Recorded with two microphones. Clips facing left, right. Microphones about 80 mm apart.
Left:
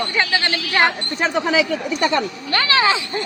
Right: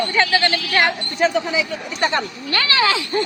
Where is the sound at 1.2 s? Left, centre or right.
Left.